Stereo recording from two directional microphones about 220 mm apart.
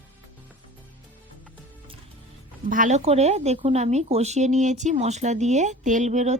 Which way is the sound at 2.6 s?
35° right (ahead or behind).